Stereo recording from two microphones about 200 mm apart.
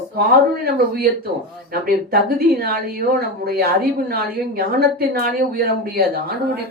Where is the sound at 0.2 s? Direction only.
50° right (ahead or behind).